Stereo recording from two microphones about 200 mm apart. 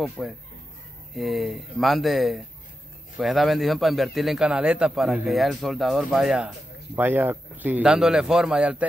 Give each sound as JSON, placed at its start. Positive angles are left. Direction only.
{"t": 0.2, "sound": "speech", "side_deg": 5}